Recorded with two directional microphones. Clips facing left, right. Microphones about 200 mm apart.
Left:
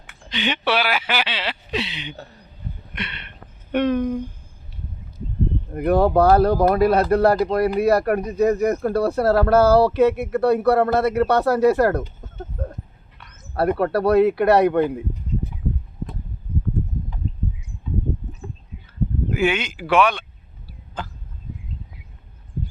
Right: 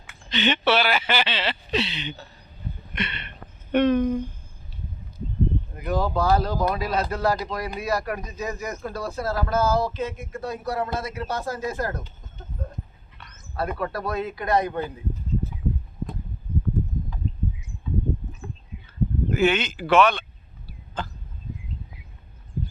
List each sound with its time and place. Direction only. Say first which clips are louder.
0.3 s speech: right 1 dB; 10° left (ahead or behind)
2.9 s a sound: right 3 dB; 5° left (ahead or behind)
3.7 s speech: even; 10° left (ahead or behind)
5.7 s speech: left 11 dB; 60° left (ahead or behind)
12.6 s dog: left 6 dB; 65° left (ahead or behind)
13.5 s speech: left 9 dB; 65° left (ahead or behind)
19.3 s speech: even; 10° left (ahead or behind)